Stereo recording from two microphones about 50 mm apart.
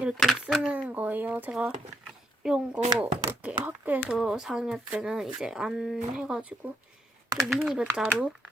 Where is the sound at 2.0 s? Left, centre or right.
Centre.